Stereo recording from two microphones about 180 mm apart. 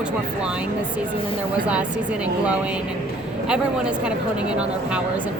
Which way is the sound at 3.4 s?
5° right (ahead or behind).